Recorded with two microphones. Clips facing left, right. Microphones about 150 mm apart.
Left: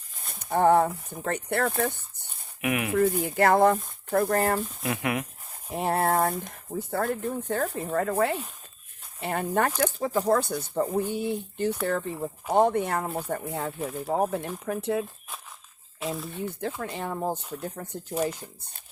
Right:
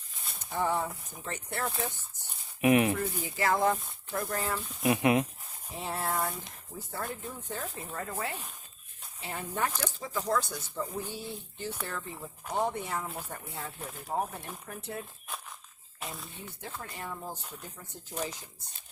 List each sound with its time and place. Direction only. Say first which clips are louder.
0.3 s speech: left 10 dB; 60° left (ahead or behind)
2.6 s speech: right 5 dB; 25° right (ahead or behind)
3.0 s speech: left 10 dB; 55° left (ahead or behind)
4.5 s speech: left 8 dB; 45° left (ahead or behind)
4.8 s speech: right 3 dB; 20° right (ahead or behind)
5.6 s speech: left 9 dB; 60° left (ahead or behind)
9.8 s speech: left 9 dB; 50° left (ahead or behind); by 15.0 s 85° left
16.0 s speech: left 10 dB; centre (ahead or behind)
16.3 s speech: left 11 dB; 90° left; by 17.4 s 65° left (ahead or behind)
17.8 s speech: left 11 dB; 75° left (ahead or behind)